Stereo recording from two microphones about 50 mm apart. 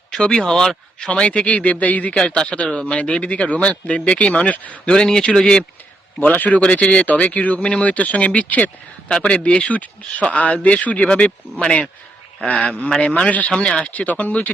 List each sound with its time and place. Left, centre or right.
0.1 s speech: centre
4.5 s speech: left
4.9 s speech: centre
6.1 s speech: left
9.0 s speech: centre
12.5 s speech: left